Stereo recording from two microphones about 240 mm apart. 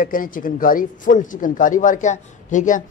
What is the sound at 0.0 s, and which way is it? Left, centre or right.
Speech, left.